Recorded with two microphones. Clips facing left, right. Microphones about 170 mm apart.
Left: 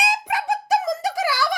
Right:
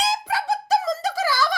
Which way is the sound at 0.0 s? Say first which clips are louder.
Even; 15° left (ahead or behind).